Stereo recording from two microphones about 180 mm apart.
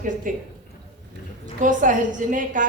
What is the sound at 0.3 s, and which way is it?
Speech, 45° right (ahead or behind).